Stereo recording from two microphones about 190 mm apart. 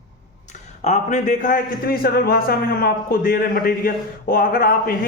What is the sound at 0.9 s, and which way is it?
A man's voice, 40° left (ahead or behind).